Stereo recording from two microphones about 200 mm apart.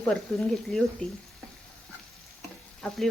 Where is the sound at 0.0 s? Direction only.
5° left (ahead or behind).